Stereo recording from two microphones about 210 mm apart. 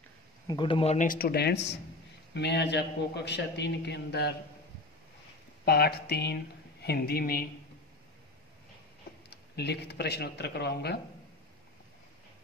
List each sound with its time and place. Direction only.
0.5 s a man's voice: 25° left (ahead or behind); by 4.3 s 50° left (ahead or behind)
5.7 s a man's voice: 50° left (ahead or behind)
9.3 s a man's voice: 50° left (ahead or behind)